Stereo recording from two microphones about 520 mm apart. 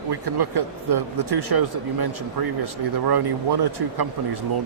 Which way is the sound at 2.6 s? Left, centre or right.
Right.